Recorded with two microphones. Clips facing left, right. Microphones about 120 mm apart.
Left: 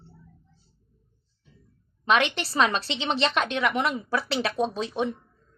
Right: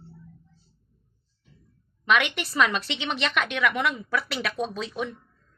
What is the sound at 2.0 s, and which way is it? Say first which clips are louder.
A woman's voice: left 1 dB; 30° left (ahead or behind).